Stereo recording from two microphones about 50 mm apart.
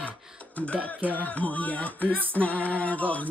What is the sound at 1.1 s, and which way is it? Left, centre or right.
Speech, left.